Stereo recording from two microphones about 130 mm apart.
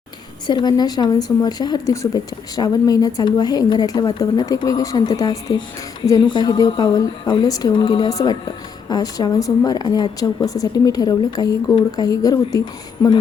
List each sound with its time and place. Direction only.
0.4 s speech: 35° left (ahead or behind)